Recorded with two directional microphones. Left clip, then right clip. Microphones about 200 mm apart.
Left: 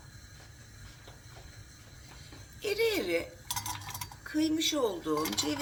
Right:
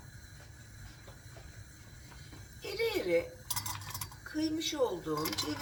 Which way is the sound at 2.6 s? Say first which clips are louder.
Left 4 dB; 55° left (ahead or behind).